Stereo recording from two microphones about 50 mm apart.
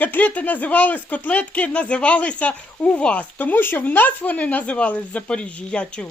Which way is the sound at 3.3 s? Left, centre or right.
Left.